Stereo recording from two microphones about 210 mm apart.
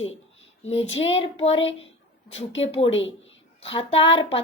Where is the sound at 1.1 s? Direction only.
30° left (ahead or behind).